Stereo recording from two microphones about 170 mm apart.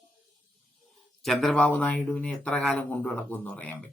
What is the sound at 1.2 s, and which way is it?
Speech, centre (ahead or behind).